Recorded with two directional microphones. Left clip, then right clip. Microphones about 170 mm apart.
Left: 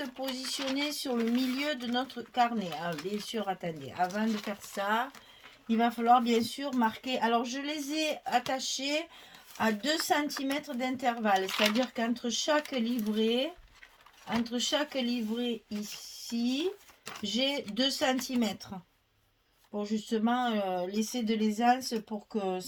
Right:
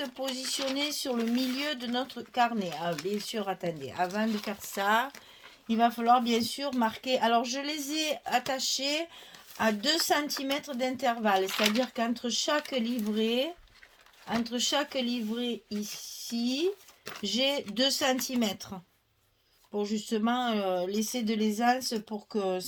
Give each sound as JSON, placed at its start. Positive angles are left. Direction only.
{"t": 0.0, "sound": "speech", "side_deg": -45}